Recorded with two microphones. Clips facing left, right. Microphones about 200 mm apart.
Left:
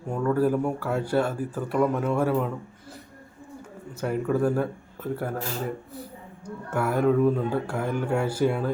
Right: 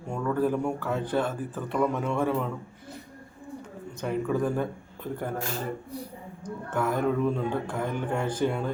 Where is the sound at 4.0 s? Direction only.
5° left (ahead or behind).